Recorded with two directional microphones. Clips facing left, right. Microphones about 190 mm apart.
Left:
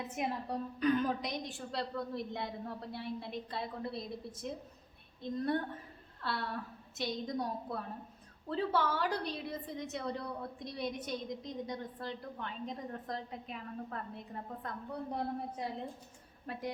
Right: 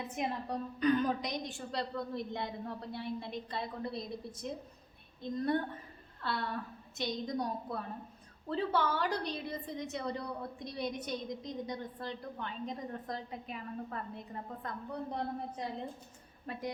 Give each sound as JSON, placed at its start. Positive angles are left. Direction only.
{"t": 0.0, "sound": "a woman's voice", "side_deg": 5}